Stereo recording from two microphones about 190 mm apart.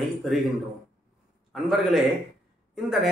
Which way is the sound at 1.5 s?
Centre (ahead or behind).